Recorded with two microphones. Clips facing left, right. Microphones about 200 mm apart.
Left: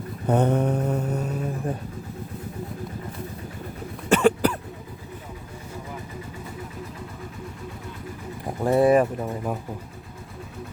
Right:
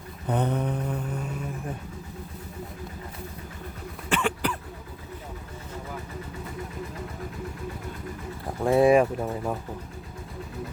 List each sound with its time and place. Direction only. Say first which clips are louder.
0.3 s mantra: left 6 dB; 45° left (ahead or behind)
4.1 s cough: left 8 dB; 40° left (ahead or behind)
8.6 s speech: left 1 dB; 5° right (ahead or behind)